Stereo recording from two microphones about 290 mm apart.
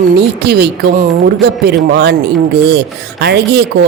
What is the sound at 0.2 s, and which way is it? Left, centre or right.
Rub, right.